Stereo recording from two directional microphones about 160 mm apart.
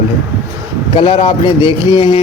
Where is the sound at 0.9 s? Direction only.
35° left (ahead or behind).